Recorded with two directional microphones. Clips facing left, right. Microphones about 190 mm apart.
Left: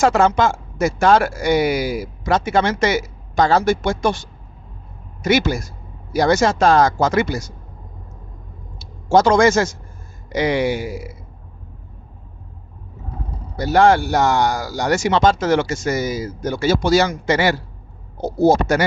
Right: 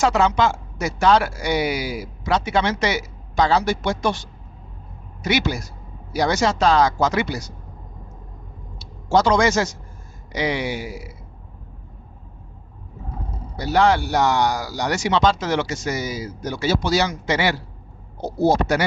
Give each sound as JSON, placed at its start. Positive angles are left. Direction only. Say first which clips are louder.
{"t": 0.0, "sound": "a man's voice", "louder": "left 3 dB", "side_deg": 50}
{"t": 8.8, "sound": "a man's voice", "louder": "left 4 dB", "side_deg": 50}
{"t": 13.6, "sound": "a man's voice", "louder": "left 4 dB", "side_deg": 50}